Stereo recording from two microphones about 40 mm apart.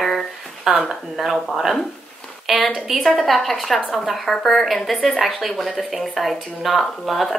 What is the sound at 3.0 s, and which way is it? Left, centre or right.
Speech, centre.